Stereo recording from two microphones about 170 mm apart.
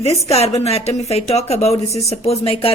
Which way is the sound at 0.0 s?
40° left (ahead or behind).